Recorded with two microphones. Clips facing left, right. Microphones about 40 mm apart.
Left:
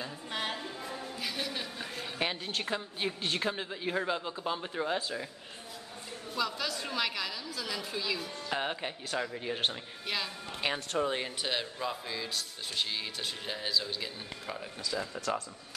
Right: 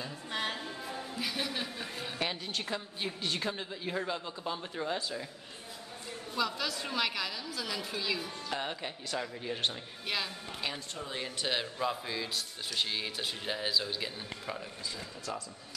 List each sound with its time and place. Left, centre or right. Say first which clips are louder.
0.0 s a sound: even; centre
2.1 s a woman's voice: left 2 dB; centre
3.4 s speech: left 3 dB; centre
6.3 s speech: even; centre
8.5 s speech: left 4 dB; centre
10.0 s speech: even; centre
10.6 s a woman's voice: left 6 dB; left
11.4 s speech: right 5 dB; centre
14.8 s speech: left 6 dB; left